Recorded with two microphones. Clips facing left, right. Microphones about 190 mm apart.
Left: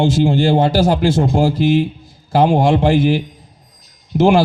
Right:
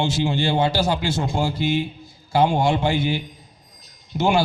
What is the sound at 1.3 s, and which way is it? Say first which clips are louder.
Speech: left 8 dB; 90° left.